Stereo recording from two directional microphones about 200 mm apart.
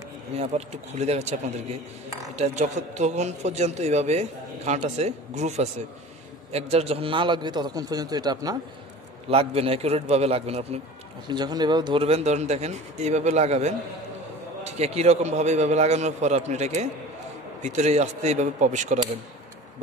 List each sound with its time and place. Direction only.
0.4 s a man's voice: 30° right (ahead or behind)
9.3 s speech: 30° right (ahead or behind)
11.2 s speech: 20° right (ahead or behind); by 18.9 s 35° right (ahead or behind)